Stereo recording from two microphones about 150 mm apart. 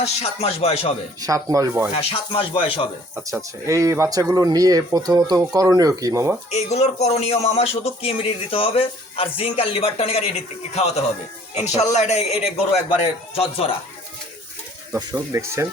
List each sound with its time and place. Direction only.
0.0 s speech: 45° left (ahead or behind)
1.2 s speech: 25° right (ahead or behind)
2.0 s speech: 40° left (ahead or behind)
3.2 s speech: 15° right (ahead or behind)
6.5 s speech: 45° left (ahead or behind)
14.9 s speech: 20° right (ahead or behind)